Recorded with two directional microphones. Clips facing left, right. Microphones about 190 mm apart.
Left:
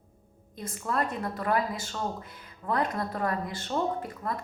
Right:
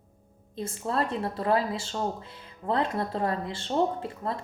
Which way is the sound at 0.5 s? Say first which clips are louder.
Right 2 dB; 30° right (ahead or behind).